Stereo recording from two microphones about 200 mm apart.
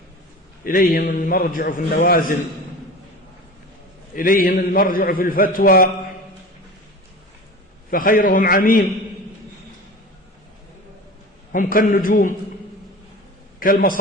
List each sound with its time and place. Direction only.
0.6 s a man's voice: 45° left (ahead or behind)
4.1 s a man's voice: 45° left (ahead or behind)
7.9 s a man's voice: 45° left (ahead or behind)
11.5 s a man's voice: 40° left (ahead or behind)
13.6 s a man's voice: 45° left (ahead or behind)